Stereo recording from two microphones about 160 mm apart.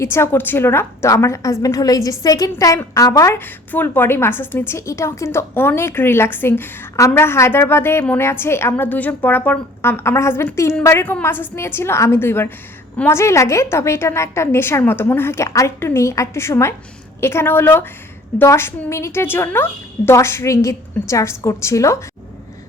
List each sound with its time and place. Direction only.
0.0 s a woman's voice: 15° left (ahead or behind)